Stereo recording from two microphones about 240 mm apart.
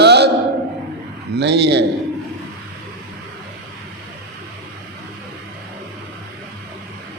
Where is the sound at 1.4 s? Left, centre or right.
Right.